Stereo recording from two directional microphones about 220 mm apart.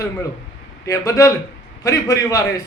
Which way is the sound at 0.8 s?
15° left (ahead or behind).